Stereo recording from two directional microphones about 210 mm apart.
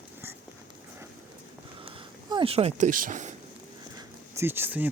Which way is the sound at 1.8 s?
25° right (ahead or behind).